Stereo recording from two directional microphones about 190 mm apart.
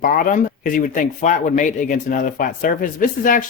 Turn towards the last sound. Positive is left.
turn(degrees=45)  # may be behind; listen again after turning